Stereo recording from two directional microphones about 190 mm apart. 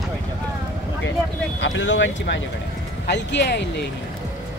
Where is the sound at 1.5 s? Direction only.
75° left (ahead or behind).